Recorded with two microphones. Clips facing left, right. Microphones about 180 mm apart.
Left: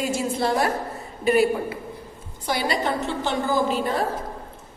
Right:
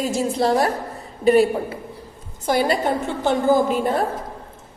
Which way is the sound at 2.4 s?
45° right (ahead or behind).